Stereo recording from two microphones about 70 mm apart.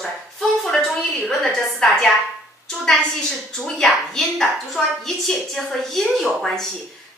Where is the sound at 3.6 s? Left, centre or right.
Centre.